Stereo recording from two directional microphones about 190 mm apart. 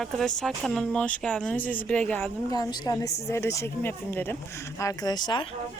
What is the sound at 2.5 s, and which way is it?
Speech, 20° left (ahead or behind).